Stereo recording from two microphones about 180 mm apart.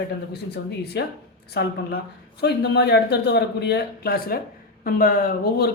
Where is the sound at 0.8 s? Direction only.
65° left (ahead or behind).